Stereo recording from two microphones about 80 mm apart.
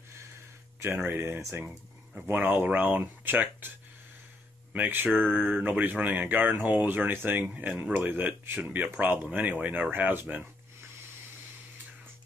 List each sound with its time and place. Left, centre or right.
0.7 s speech: right
4.7 s speech: right